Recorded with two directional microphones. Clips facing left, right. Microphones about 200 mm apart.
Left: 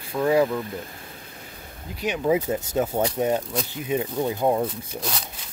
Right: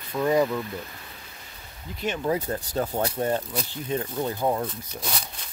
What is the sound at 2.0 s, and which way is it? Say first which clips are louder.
Speech: left 4 dB; 15° left (ahead or behind).